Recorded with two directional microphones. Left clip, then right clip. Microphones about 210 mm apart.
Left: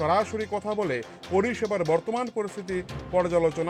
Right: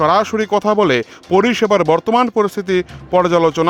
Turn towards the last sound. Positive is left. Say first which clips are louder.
# right 10 dB
turn(degrees=-50)  # may be behind; listen again after turning